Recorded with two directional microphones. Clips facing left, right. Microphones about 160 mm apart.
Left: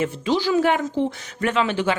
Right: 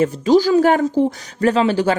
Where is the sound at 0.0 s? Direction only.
40° right (ahead or behind).